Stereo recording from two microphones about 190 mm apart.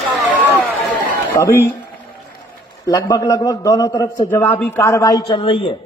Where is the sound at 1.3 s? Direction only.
15° left (ahead or behind).